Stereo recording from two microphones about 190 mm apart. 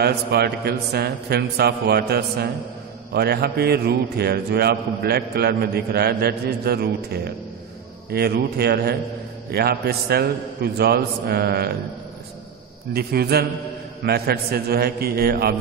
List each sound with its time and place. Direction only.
0.0 s a man's voice: 55° right (ahead or behind)
12.9 s a man's voice: 55° right (ahead or behind)